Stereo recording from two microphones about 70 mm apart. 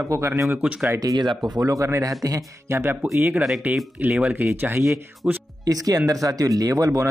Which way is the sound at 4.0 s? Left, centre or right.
Centre.